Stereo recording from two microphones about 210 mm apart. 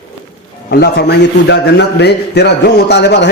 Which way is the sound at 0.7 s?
50° left (ahead or behind).